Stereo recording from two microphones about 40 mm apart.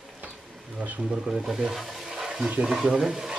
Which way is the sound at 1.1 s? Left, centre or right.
Right.